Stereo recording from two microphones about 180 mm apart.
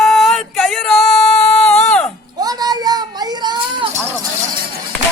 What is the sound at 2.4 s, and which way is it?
A child's voice, 20° right (ahead or behind).